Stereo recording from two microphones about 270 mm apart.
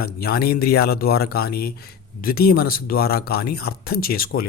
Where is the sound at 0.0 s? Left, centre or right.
Left.